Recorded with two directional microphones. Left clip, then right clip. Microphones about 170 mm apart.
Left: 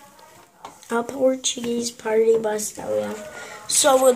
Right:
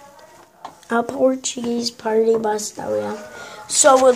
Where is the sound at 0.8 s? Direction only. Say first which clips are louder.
Right 3 dB; 15° right (ahead or behind).